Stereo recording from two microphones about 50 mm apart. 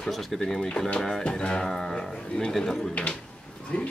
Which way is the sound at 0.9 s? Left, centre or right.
Centre.